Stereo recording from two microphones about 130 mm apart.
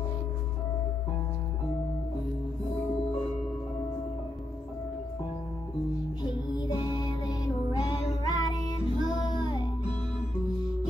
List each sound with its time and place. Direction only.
6.2 s music: 30° left (ahead or behind)